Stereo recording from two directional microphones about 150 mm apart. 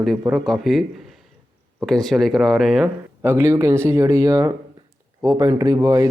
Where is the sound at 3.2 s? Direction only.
15° right (ahead or behind).